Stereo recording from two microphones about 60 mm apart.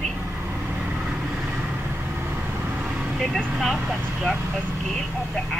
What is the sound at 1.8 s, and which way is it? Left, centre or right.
Vehicle, right.